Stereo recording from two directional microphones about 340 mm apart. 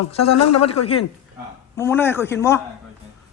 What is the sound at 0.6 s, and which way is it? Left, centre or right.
Speech, centre.